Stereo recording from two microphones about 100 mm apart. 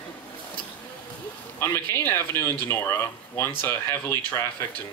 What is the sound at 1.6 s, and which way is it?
Speech, 20° left (ahead or behind).